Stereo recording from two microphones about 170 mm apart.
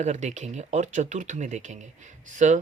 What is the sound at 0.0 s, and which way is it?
Speech, 45° right (ahead or behind).